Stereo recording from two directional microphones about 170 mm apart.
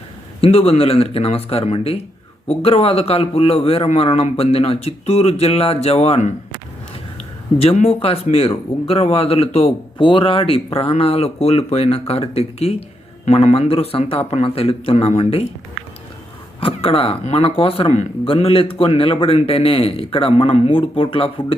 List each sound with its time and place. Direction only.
0.4 s speech: 35° left (ahead or behind)
8.0 s speech: 35° left (ahead or behind)
16.6 s speech: 35° left (ahead or behind)